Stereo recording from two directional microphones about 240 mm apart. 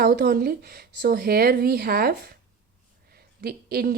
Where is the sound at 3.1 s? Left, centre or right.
Right.